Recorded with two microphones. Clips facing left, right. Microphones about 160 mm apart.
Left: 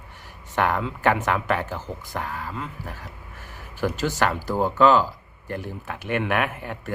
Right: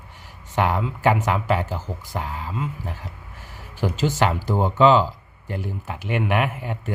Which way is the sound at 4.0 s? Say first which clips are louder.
Right 4 dB; 20° right (ahead or behind).